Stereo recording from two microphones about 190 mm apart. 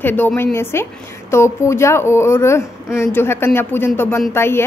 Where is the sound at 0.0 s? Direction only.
10° left (ahead or behind).